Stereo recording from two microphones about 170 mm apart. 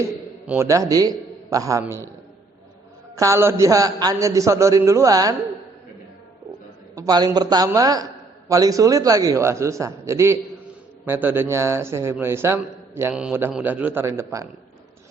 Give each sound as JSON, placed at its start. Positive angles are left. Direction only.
{"t": 0.0, "sound": "a man's voice", "side_deg": -15}
{"t": 3.2, "sound": "a man's voice", "side_deg": -15}
{"t": 6.9, "sound": "a man's voice", "side_deg": -20}